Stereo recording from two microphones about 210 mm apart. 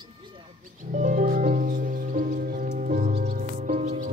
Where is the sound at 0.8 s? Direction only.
35° right (ahead or behind).